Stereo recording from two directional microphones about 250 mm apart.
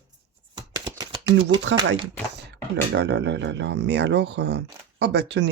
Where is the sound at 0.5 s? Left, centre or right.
Centre.